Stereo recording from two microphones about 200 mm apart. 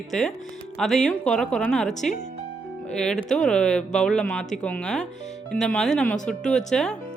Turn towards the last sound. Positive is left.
turn(degrees=5)  # may be behind; listen again after turning